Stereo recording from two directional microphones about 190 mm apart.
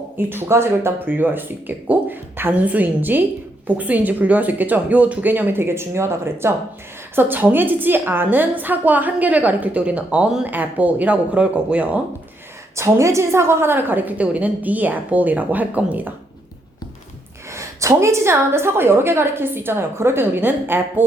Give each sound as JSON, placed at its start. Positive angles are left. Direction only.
{"t": 0.2, "sound": "a woman's voice", "side_deg": -10}
{"t": 17.5, "sound": "a woman's voice", "side_deg": -15}